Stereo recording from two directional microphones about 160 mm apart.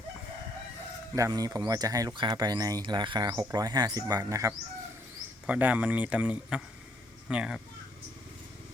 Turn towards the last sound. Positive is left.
turn(degrees=-5)  # may be behind; listen again after turning